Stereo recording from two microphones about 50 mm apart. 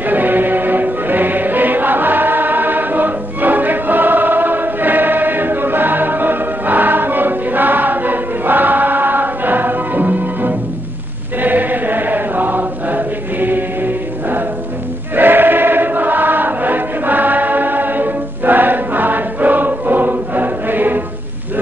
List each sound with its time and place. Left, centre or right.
0.0 s music: right
11.4 s chant: right
15.1 s choir: right